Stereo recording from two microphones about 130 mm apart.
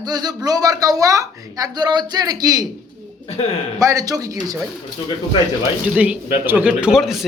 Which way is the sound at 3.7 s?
25° right (ahead or behind).